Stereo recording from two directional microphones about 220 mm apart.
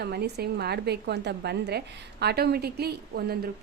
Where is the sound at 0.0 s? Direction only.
45° right (ahead or behind).